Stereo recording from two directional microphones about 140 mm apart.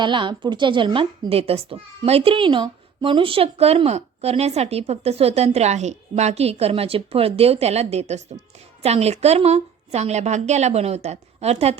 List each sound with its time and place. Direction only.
0.0 s a woman's voice: 35° right (ahead or behind)
1.3 s speech: 45° right (ahead or behind)